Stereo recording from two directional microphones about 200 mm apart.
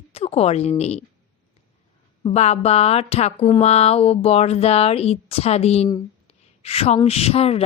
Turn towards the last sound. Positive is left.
turn(degrees=30)  # may be behind; listen again after turning